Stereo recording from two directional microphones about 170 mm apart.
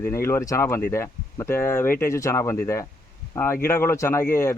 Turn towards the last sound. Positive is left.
turn(degrees=15)  # may be behind; listen again after turning